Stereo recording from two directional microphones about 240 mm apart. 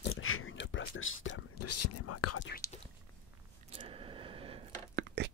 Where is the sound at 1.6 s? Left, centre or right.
Left.